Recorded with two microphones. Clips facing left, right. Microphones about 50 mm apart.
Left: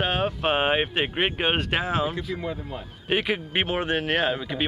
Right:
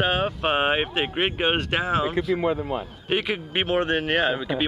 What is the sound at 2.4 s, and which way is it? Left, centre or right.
Speech, right.